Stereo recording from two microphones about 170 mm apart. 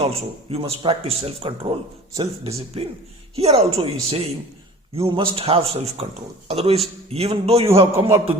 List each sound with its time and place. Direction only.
0.0 s speech: 35° right (ahead or behind)
7.9 s a man's voice: 15° right (ahead or behind)